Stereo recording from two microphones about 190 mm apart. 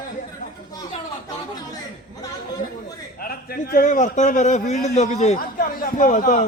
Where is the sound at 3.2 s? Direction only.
50° left (ahead or behind).